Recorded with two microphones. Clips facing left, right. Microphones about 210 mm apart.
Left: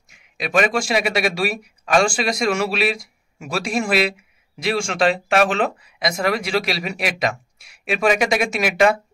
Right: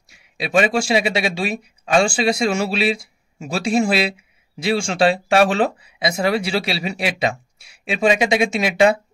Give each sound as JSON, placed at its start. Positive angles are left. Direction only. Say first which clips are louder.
{"t": 0.4, "sound": "speech", "louder": "right 2 dB", "side_deg": -30}